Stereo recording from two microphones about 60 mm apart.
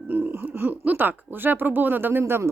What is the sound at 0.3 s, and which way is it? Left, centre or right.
Laughter, right.